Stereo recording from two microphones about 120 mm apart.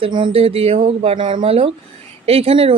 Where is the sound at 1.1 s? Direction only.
45° right (ahead or behind).